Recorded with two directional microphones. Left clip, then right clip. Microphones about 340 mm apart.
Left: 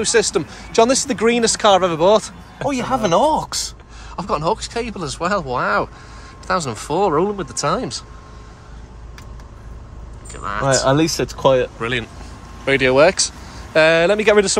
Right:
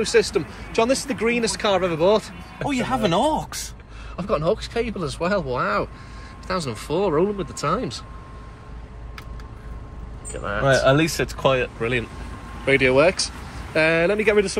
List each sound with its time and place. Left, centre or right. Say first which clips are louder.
0.0 s speech: left 2 dB; centre
2.7 s speech: left 4 dB; left
4.2 s speech: left 2 dB; centre
10.3 s speech: left 2 dB; centre
10.6 s speech: left 1 dB; left
11.8 s speech: left 2 dB; centre